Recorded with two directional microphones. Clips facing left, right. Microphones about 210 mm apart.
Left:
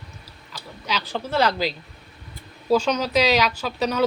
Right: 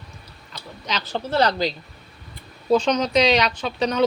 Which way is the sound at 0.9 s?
10° left (ahead or behind).